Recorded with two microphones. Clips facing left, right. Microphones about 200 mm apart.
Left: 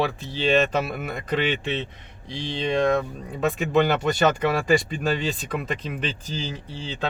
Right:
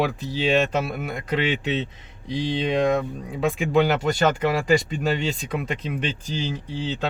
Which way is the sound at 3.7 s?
10° right (ahead or behind).